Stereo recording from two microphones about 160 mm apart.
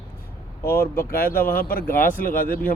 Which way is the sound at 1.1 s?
65° left (ahead or behind).